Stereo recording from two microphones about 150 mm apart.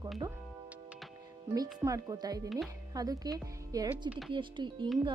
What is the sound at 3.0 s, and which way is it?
Speech, 25° right (ahead or behind).